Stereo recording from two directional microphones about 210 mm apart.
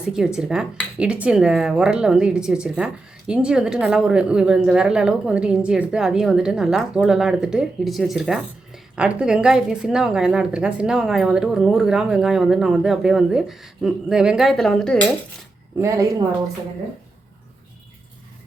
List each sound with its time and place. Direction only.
0.0 s speech: 5° right (ahead or behind)
15.8 s speech: 15° right (ahead or behind)